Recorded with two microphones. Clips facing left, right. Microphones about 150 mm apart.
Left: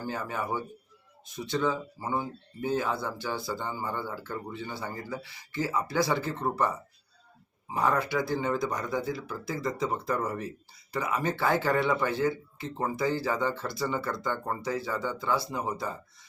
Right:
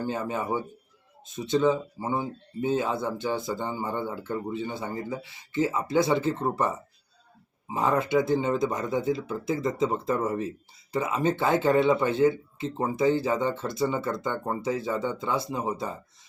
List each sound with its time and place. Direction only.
0.0 s speech: 20° right (ahead or behind)